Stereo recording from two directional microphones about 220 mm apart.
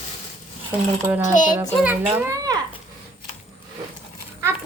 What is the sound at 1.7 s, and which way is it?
Speech, 5° right (ahead or behind).